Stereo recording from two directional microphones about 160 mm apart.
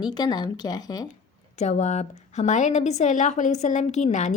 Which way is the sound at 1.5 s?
45° left (ahead or behind).